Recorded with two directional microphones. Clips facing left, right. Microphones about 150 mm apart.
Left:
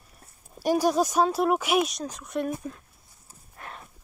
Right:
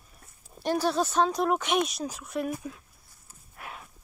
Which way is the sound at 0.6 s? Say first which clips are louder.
Left 4 dB; 10° left (ahead or behind).